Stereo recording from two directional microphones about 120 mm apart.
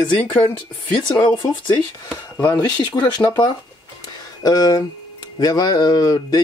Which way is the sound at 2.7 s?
35° left (ahead or behind).